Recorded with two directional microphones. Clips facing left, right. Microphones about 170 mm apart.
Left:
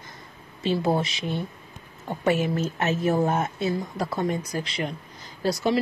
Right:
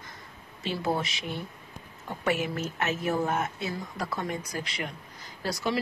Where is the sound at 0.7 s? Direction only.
30° left (ahead or behind).